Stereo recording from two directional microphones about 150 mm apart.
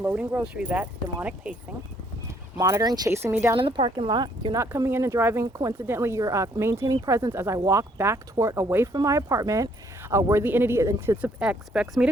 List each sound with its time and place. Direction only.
0.0 s speech: 10° right (ahead or behind)
2.6 s speech: 20° right (ahead or behind)
3.6 s speech: 35° right (ahead or behind)
4.6 s speech: 15° right (ahead or behind)
11.3 s speech: 5° right (ahead or behind)